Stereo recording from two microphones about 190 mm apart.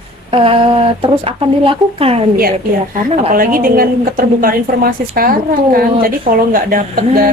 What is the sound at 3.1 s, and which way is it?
A woman's voice, 40° right (ahead or behind).